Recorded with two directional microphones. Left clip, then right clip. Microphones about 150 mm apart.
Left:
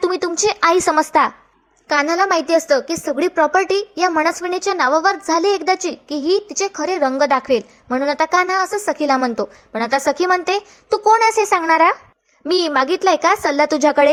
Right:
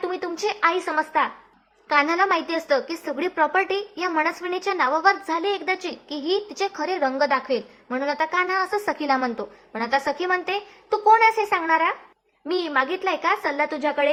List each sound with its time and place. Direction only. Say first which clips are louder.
0.0 s a woman's voice: left 8 dB; 35° left (ahead or behind)
1.9 s a woman's voice: left 4 dB; 30° left (ahead or behind)